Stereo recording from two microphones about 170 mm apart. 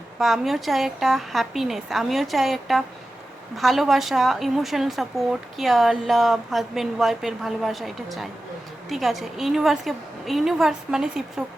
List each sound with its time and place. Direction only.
0.2 s a woman's voice: centre (ahead or behind)